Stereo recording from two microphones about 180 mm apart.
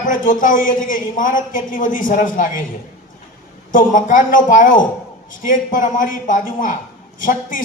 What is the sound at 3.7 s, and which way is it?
A man's voice, 50° left (ahead or behind).